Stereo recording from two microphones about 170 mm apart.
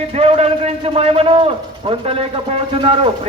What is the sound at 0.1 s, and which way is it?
A man's voice, 35° right (ahead or behind).